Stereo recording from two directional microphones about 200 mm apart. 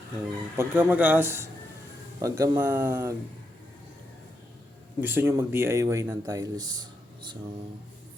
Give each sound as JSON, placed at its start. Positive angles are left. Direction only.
{"t": 0.5, "sound": "speech", "side_deg": -10}
{"t": 4.9, "sound": "speech", "side_deg": -10}